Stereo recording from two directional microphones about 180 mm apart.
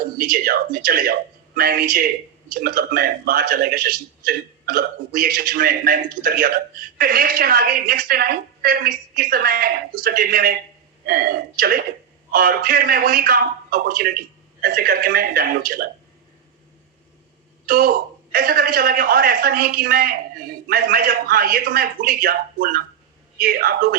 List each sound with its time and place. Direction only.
0.2 s a man's voice: 55° right (ahead or behind)
17.7 s a man's voice: 55° right (ahead or behind)